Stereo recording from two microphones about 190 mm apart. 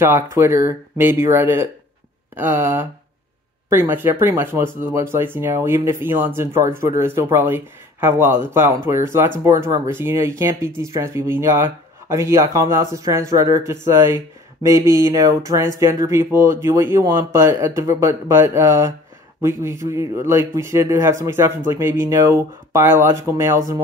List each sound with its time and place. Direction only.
0.0 s speech: 15° right (ahead or behind)